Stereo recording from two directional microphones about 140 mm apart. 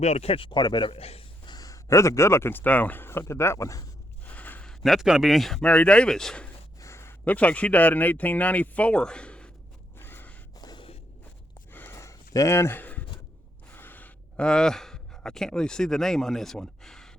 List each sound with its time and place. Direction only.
0.0 s a man's voice: 50° left (ahead or behind)
1.5 s speech: 25° left (ahead or behind)
4.3 s speech: 10° left (ahead or behind)
6.7 s a man's voice: 20° left (ahead or behind)
10.0 s gasp: 15° left (ahead or behind)
10.6 s a sound: 30° left (ahead or behind)
11.7 s a sound: 15° left (ahead or behind)